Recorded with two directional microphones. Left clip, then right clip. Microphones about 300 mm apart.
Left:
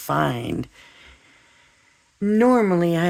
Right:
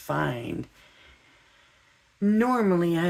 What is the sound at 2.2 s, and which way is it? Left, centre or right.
Speech, left.